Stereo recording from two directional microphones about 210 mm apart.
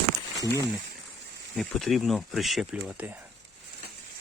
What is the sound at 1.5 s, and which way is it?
Speech, centre (ahead or behind).